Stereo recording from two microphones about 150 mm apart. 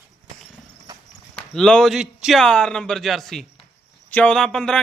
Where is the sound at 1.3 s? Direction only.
5° left (ahead or behind).